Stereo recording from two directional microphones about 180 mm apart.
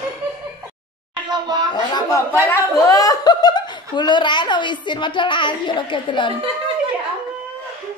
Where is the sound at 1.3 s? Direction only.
25° right (ahead or behind).